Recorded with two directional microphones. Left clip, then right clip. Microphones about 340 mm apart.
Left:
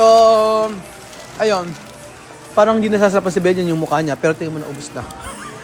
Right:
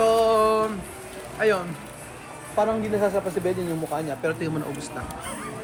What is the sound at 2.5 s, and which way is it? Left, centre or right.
A man's voice, left.